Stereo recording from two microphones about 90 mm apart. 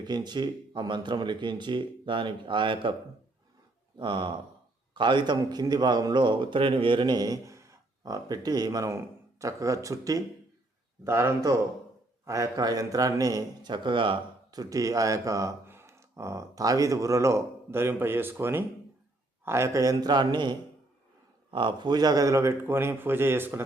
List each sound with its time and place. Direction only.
0.0 s speech: 55° right (ahead or behind)
3.9 s a man's voice: 60° right (ahead or behind); by 10.2 s 40° right (ahead or behind)
11.0 s a man's voice: 30° right (ahead or behind); by 14.2 s 70° right (ahead or behind)
14.5 s a man's voice: 45° right (ahead or behind); by 23.6 s 25° right (ahead or behind)